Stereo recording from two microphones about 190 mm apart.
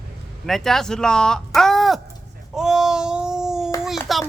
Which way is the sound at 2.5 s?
5° right (ahead or behind).